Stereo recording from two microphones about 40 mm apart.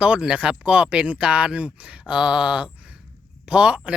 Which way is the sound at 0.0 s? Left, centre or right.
Right.